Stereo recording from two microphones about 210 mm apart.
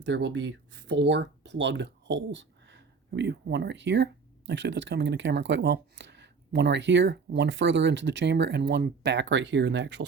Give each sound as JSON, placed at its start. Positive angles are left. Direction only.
{"t": 0.0, "sound": "speech", "side_deg": -60}